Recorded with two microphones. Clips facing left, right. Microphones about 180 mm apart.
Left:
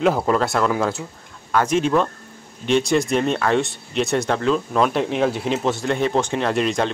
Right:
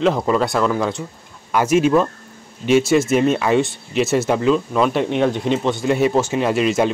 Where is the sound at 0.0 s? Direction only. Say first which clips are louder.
Right 1 dB; 5° left (ahead or behind).